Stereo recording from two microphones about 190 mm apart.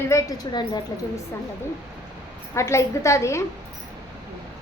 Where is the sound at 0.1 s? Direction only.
20° left (ahead or behind).